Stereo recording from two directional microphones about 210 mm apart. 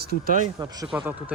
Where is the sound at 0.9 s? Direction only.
5° right (ahead or behind).